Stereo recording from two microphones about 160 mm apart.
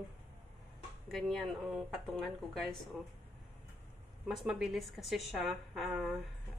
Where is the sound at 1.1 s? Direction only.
Centre (ahead or behind).